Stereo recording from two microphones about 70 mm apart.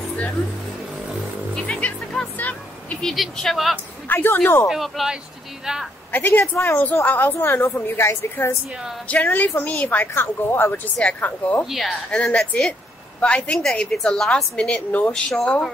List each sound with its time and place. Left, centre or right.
1.8 s music: centre
3.0 s speech: centre
3.7 s a woman's voice: left
4.6 s a woman's voice: centre
6.1 s a woman's voice: left
9.0 s a woman's voice: left
11.6 s speech: centre
12.1 s a woman's voice: centre